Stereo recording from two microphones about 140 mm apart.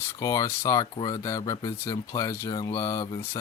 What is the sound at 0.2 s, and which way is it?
Speech, 20° left (ahead or behind).